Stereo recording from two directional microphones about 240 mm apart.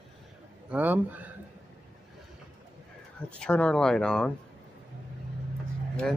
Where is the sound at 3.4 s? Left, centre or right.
Centre.